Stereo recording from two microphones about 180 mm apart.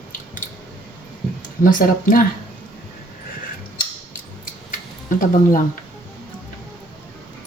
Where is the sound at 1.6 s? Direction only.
50° left (ahead or behind).